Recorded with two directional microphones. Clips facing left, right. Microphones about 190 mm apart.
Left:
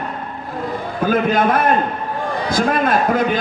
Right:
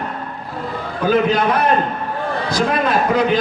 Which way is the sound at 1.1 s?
50° left (ahead or behind).